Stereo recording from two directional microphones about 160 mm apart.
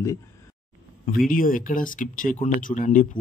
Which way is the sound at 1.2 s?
60° left (ahead or behind).